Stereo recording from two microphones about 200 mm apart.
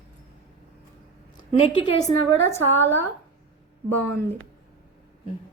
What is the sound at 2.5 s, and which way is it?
A woman's voice, 10° left (ahead or behind).